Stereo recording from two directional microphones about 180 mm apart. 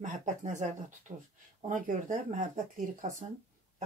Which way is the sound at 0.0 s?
40° right (ahead or behind).